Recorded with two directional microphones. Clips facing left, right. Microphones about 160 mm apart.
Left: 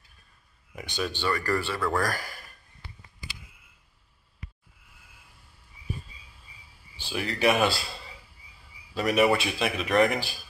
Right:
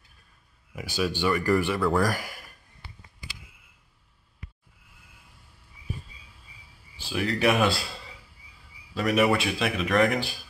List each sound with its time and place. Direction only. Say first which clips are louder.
0.7 s speech: right 4 dB; 5° right (ahead or behind)
1.8 s speech: right 4 dB; centre (ahead or behind)
2.0 s speech: right 3 dB; 15° right (ahead or behind)
7.0 s speech: right 2 dB; centre (ahead or behind)
8.9 s speech: even; centre (ahead or behind)